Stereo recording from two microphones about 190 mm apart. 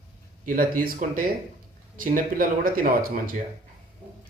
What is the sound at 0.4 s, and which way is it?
Speech, 45° right (ahead or behind).